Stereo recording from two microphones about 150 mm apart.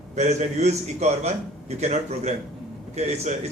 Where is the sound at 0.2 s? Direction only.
50° right (ahead or behind).